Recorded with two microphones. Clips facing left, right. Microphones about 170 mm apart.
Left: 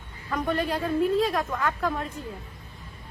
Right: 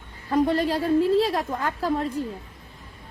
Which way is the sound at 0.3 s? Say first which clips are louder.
Right 5 dB; 35° right (ahead or behind).